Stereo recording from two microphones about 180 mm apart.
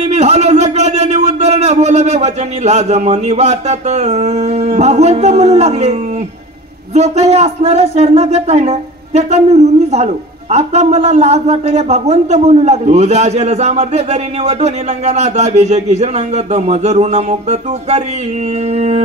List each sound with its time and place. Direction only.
0.0 s a man's voice: 35° right (ahead or behind)